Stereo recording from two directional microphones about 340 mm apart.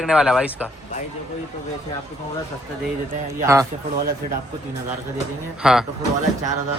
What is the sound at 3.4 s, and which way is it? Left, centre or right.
Speech, centre.